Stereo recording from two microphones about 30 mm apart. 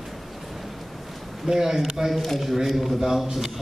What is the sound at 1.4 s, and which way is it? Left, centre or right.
A man's voice, centre.